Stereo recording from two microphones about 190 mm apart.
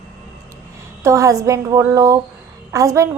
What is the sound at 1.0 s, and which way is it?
A woman's voice, 15° right (ahead or behind).